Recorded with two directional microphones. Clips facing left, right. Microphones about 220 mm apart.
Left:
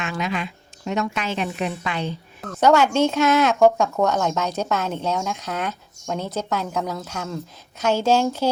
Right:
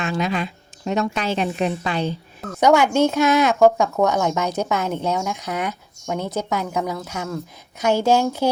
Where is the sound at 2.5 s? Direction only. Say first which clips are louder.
Right 1 dB; 15° right (ahead or behind).